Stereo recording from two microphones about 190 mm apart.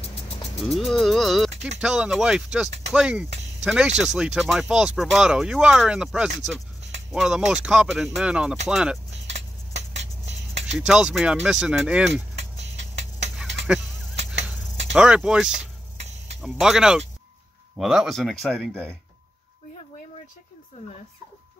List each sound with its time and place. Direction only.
0.6 s speech: centre (ahead or behind)
9.1 s a sound: 70° right (ahead or behind)
10.8 s speech: 5° right (ahead or behind)
15.0 s speech: 5° right (ahead or behind)